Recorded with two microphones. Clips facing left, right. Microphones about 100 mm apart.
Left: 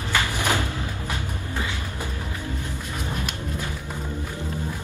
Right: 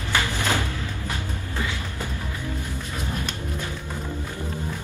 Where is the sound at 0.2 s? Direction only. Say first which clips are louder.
Left 1 dB; 15° left (ahead or behind).